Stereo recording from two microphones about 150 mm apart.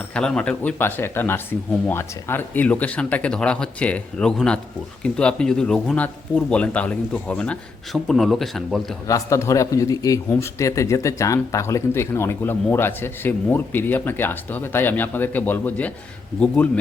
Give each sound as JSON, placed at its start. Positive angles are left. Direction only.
{"t": 0.1, "sound": "speech", "side_deg": 5}
{"t": 9.0, "sound": "speech", "side_deg": 20}